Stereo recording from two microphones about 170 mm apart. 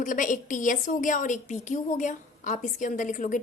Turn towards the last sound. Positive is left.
turn(degrees=50)  # may be behind; listen again after turning